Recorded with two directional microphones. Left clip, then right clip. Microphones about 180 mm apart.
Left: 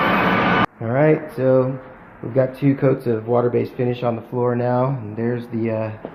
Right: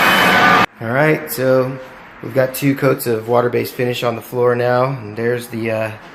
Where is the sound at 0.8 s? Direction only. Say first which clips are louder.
Right 2 dB; 5° right (ahead or behind).